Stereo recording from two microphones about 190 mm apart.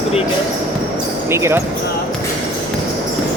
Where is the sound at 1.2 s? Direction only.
15° right (ahead or behind).